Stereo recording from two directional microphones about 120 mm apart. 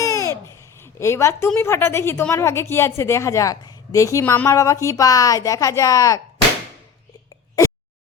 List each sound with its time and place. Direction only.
0.0 s babbling: 25° left (ahead or behind)
1.5 s a woman's voice: 20° left (ahead or behind)
4.2 s a woman's voice: 15° left (ahead or behind)
4.4 s a woman's voice: 25° left (ahead or behind)